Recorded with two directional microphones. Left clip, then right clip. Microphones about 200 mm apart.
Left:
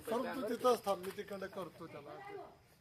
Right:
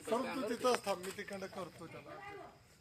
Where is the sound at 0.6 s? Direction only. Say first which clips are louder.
Left 2 dB; 45° left (ahead or behind).